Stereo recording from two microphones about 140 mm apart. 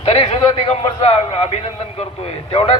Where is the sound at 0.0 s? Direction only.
45° left (ahead or behind).